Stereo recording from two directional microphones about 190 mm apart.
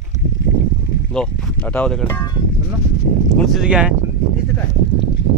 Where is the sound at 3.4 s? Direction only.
Centre (ahead or behind).